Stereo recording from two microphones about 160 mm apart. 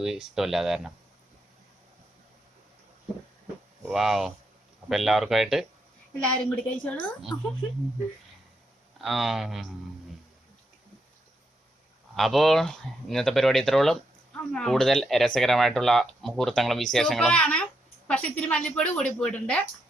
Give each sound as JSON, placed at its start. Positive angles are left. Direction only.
{"t": 0.0, "sound": "speech", "side_deg": -5}
{"t": 3.8, "sound": "a woman's voice", "side_deg": 0}
{"t": 9.0, "sound": "speech", "side_deg": 0}
{"t": 12.1, "sound": "a woman's voice", "side_deg": 0}